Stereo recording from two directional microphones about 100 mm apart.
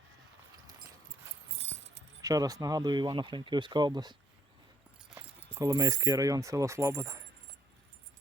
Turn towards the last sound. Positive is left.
turn(degrees=-30)  # may be behind; listen again after turning